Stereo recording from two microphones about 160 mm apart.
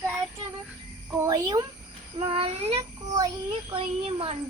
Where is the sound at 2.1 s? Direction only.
35° right (ahead or behind).